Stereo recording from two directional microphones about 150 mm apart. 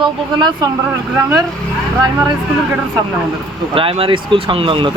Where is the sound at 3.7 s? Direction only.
40° right (ahead or behind).